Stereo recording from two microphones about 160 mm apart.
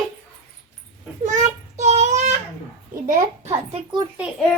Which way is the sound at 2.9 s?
50° right (ahead or behind).